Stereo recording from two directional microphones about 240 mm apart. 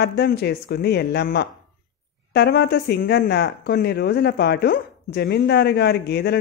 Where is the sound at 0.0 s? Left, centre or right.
Left.